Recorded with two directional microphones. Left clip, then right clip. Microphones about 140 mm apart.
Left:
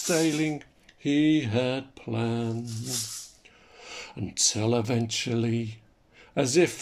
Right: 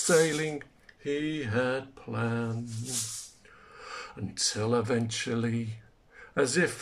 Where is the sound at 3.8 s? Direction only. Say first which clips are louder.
Left 1 dB; 20° left (ahead or behind).